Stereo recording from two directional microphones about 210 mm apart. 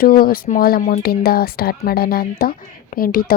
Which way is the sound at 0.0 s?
45° left (ahead or behind).